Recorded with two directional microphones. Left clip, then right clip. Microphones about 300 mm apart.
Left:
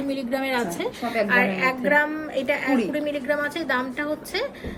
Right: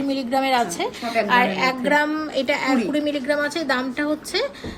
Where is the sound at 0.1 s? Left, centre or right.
Centre.